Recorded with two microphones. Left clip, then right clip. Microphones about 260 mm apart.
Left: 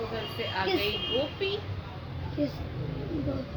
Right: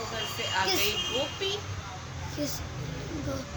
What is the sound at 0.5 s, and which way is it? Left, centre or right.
Speech, centre.